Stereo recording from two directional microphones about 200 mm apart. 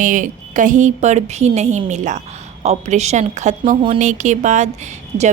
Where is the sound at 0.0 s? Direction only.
40° right (ahead or behind).